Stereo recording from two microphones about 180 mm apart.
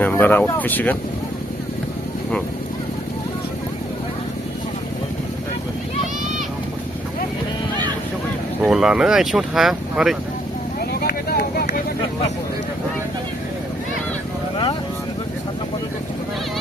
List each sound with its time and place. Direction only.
0.0 s speech: 10° left (ahead or behind)
8.6 s speech: 5° right (ahead or behind)
10.8 s vehicle: 60° left (ahead or behind)